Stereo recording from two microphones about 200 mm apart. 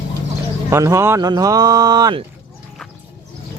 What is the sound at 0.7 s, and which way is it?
Speech, 15° right (ahead or behind).